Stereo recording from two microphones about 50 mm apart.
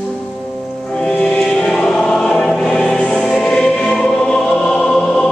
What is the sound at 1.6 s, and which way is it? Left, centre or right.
Choir, centre.